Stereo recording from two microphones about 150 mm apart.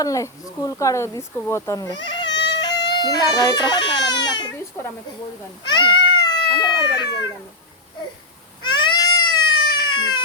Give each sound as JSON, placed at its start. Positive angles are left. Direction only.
{"t": 0.0, "sound": "speech", "side_deg": 20}
{"t": 4.8, "sound": "speech", "side_deg": 20}
{"t": 5.7, "sound": "speech", "side_deg": 30}
{"t": 6.1, "sound": "cat", "side_deg": 30}
{"t": 8.6, "sound": "a sound", "side_deg": 30}